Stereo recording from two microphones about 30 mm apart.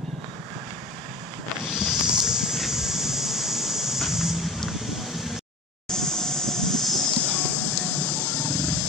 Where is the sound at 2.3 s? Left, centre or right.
Centre.